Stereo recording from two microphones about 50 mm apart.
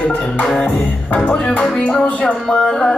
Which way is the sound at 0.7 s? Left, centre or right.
Left.